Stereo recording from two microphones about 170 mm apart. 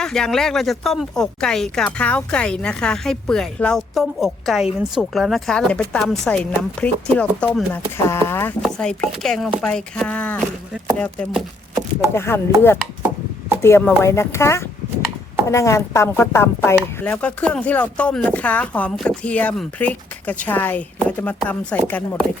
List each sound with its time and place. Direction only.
0.0 s speech: 5° left (ahead or behind)
8.6 s speech: 5° left (ahead or behind)